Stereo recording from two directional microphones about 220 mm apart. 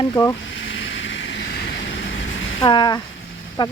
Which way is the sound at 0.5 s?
60° left (ahead or behind).